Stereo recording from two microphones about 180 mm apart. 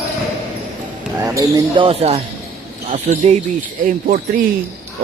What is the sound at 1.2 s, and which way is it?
Speech, 20° right (ahead or behind).